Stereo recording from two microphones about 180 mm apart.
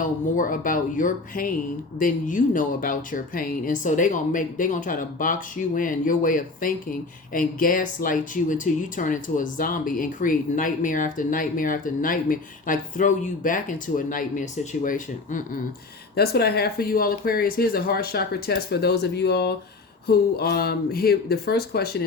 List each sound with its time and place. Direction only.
0.0 s speech: 45° left (ahead or behind)
16.1 s speech: 60° left (ahead or behind)